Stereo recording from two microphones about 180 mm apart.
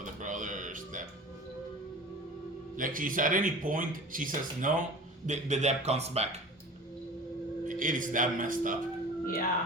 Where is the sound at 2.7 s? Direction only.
50° right (ahead or behind).